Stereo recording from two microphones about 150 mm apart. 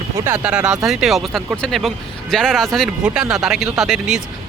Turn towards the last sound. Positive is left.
turn(degrees=0)  # may be behind; listen again after turning